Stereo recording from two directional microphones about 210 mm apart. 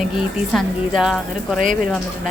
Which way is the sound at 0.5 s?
Centre (ahead or behind).